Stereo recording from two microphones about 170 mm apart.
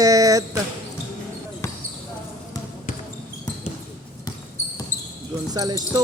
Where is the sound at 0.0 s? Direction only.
20° right (ahead or behind).